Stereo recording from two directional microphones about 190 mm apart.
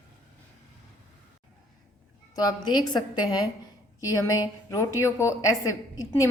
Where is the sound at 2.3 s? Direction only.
20° left (ahead or behind).